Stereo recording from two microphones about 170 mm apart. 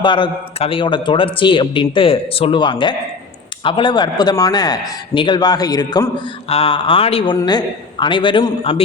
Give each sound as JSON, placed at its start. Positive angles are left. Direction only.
{"t": 0.0, "sound": "speech", "side_deg": 30}